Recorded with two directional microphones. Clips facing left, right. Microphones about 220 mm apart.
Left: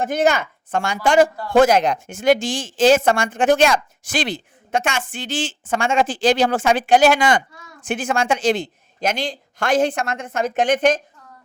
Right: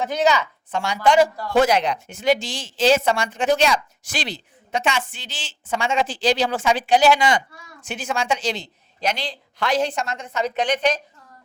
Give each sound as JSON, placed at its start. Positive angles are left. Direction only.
{"t": 0.0, "sound": "a man's voice", "side_deg": 50}